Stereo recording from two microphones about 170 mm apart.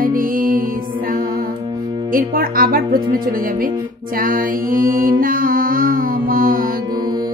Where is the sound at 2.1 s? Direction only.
60° right (ahead or behind).